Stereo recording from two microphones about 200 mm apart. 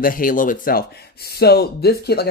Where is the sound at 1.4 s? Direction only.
55° left (ahead or behind).